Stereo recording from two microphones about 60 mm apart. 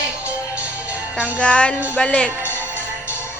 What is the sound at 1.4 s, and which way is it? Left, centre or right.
Music, centre.